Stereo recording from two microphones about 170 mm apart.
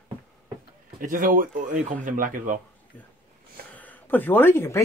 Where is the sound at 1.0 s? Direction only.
50° right (ahead or behind).